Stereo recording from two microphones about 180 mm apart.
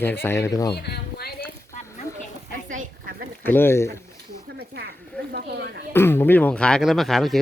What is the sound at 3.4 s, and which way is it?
Speech, 10° left (ahead or behind).